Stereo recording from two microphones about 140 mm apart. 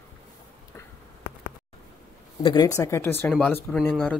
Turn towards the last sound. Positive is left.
turn(degrees=10)  # may be behind; listen again after turning